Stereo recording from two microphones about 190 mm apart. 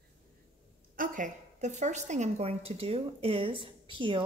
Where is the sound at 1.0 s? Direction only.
45° right (ahead or behind).